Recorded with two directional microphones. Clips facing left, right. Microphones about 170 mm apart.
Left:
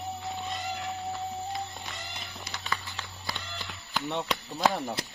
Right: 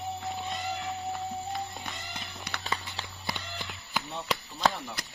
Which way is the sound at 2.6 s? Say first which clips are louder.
Even; 25° right (ahead or behind).